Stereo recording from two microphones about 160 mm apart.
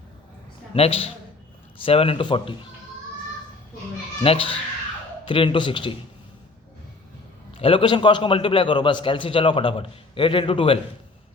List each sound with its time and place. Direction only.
0.7 s a man's voice: 35° left (ahead or behind)
4.2 s a man's voice: 35° left (ahead or behind)
7.5 s a man's voice: 35° left (ahead or behind)